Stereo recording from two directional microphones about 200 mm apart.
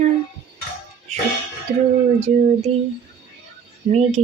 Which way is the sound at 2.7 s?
35° right (ahead or behind).